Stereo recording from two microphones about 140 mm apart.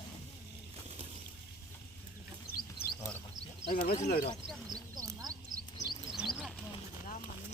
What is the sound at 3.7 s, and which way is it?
Speech, 90° left.